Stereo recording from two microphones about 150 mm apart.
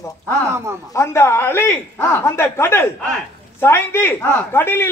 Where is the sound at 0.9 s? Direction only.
15° left (ahead or behind).